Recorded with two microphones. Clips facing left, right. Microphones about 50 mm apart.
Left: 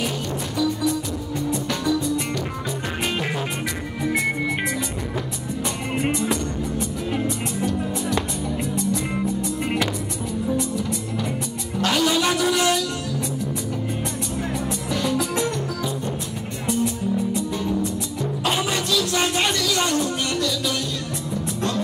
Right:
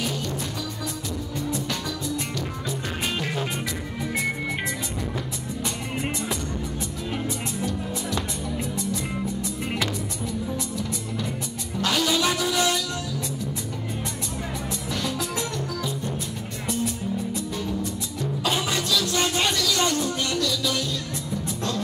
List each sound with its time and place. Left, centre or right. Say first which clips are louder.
5.9 s music: left 8 dB; left
11.9 s a sound: left 3 dB; centre
14.9 s music: left 6 dB; centre
18.7 s music: left 2 dB; centre
19.9 s music: left 2 dB; left